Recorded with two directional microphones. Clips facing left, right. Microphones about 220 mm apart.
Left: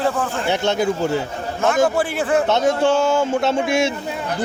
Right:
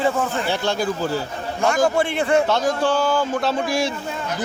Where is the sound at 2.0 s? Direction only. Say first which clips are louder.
Even; 5° left (ahead or behind).